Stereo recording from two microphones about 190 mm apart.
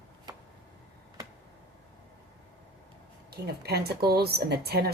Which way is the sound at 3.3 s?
55° right (ahead or behind).